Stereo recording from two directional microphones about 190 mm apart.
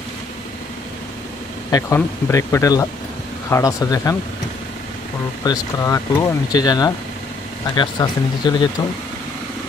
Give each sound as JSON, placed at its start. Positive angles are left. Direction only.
{"t": 1.7, "sound": "speech", "side_deg": 15}
{"t": 5.4, "sound": "speech", "side_deg": 20}